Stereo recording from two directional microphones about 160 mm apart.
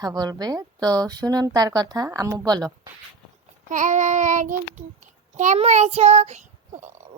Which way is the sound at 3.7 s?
50° right (ahead or behind).